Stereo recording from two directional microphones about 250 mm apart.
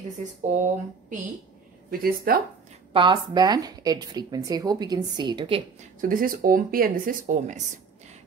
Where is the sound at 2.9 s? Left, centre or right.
Centre.